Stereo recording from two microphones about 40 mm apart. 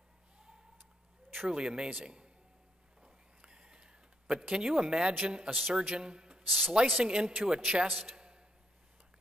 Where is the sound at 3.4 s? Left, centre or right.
Right.